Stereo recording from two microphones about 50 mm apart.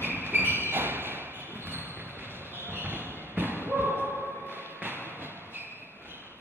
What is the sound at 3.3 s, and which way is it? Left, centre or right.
Thump, right.